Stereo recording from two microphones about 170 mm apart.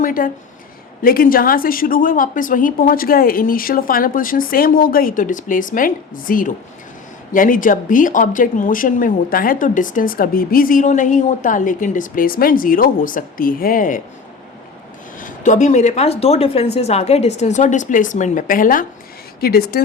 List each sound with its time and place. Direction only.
0.0 s a woman's voice: 55° left (ahead or behind)
15.2 s a woman's voice: 45° left (ahead or behind); by 19.8 s 65° left (ahead or behind)